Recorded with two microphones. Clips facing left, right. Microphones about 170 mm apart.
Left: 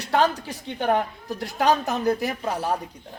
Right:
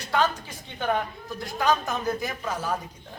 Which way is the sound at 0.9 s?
75° left (ahead or behind).